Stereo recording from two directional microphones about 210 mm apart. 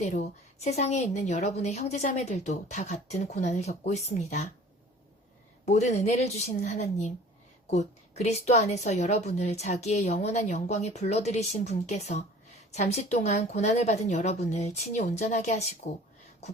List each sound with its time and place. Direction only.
0.0 s a woman's voice: 35° left (ahead or behind)
5.6 s a woman's voice: 30° left (ahead or behind)